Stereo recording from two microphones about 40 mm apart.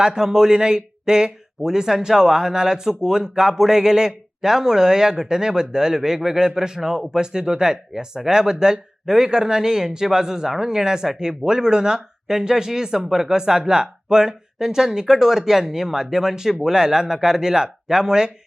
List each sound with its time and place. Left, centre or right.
0.0 s a man's voice: centre